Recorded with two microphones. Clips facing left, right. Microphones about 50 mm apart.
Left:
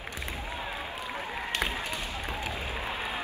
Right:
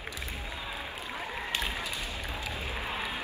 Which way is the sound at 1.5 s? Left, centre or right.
Left.